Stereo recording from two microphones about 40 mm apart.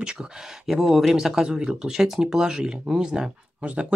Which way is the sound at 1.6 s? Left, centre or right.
Right.